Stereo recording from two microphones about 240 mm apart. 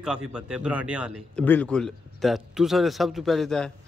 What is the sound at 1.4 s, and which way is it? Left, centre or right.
A man's voice, centre.